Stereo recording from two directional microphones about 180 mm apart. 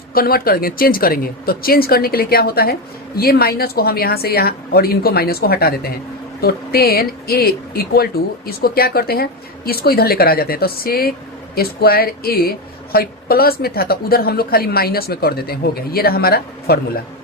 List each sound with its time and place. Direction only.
0.1 s a woman's voice: 55° left (ahead or behind)